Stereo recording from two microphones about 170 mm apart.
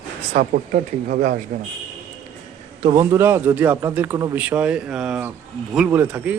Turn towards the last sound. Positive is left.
turn(degrees=-10)  # may be behind; listen again after turning